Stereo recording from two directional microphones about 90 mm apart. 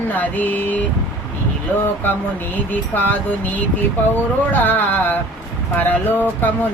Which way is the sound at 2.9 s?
20° left (ahead or behind).